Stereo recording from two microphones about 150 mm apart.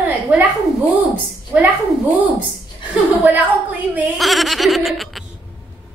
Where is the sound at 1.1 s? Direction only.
10° right (ahead or behind).